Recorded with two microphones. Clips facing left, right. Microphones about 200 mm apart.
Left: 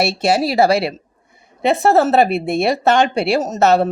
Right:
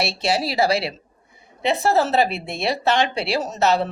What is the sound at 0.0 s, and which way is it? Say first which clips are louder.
A woman's voice: left 6 dB; 50° left (ahead or behind).